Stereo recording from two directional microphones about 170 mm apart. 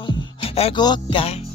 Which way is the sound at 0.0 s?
35° left (ahead or behind).